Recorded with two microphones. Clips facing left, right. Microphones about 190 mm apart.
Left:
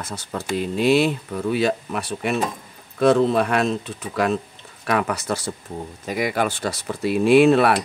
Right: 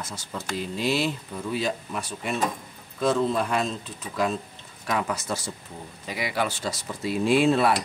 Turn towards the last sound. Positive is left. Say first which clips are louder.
# left 6 dB
turn(degrees=65)  # may be behind; listen again after turning